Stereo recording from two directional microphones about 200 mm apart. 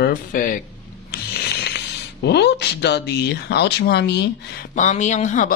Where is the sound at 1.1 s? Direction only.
55° left (ahead or behind).